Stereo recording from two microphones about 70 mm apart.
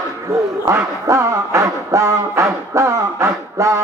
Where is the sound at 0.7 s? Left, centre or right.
Right.